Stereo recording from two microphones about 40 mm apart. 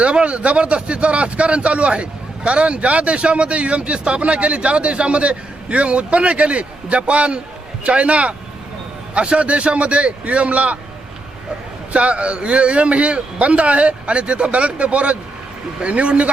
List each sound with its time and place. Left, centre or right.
0.0 s a man's voice: right
11.9 s a man's voice: right